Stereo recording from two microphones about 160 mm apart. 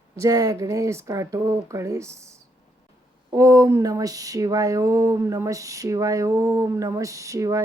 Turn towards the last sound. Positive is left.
turn(degrees=-20)  # may be behind; listen again after turning